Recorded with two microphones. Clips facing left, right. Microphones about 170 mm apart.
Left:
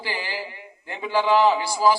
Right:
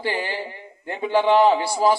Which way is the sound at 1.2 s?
25° right (ahead or behind).